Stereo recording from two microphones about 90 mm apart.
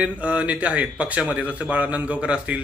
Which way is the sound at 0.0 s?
15° right (ahead or behind).